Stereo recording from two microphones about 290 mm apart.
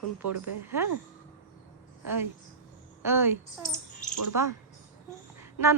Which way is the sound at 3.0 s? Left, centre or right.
Centre.